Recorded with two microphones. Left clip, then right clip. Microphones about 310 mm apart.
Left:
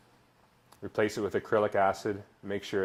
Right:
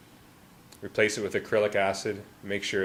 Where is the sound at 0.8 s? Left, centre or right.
Centre.